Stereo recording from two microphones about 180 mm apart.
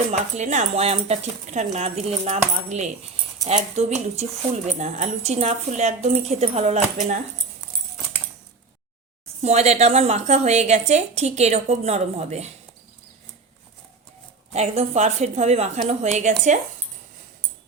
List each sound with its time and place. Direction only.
0.1 s speech: 40° right (ahead or behind)
9.4 s speech: 35° right (ahead or behind)
14.5 s speech: 35° right (ahead or behind)